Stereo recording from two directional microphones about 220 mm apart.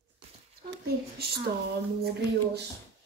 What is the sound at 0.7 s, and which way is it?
Speech, 45° right (ahead or behind).